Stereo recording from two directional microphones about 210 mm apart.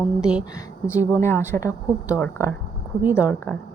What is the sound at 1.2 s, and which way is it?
A woman's voice, 10° left (ahead or behind).